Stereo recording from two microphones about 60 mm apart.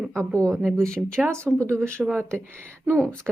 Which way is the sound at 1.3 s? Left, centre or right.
Left.